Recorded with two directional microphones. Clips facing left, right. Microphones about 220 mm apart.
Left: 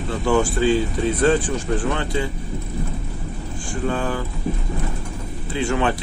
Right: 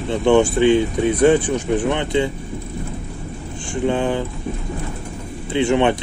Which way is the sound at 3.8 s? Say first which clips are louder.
Right 5 dB; 20° right (ahead or behind).